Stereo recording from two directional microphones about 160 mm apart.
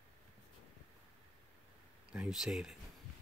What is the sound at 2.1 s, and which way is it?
Speech, 5° right (ahead or behind).